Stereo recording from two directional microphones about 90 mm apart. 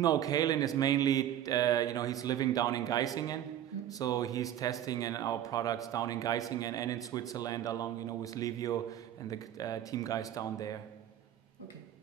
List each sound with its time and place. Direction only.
0.0 s speech: 45° left (ahead or behind)